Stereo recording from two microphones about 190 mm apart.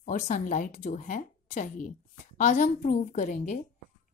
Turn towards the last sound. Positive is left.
turn(degrees=40)  # may be behind; listen again after turning